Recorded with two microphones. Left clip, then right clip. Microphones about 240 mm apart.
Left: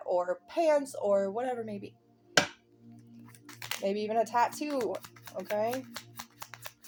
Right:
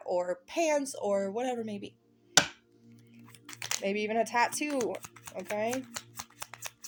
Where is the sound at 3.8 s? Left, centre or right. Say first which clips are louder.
Left 1 dB; right.